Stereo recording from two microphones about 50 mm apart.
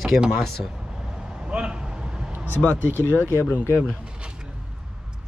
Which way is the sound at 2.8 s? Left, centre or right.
Right.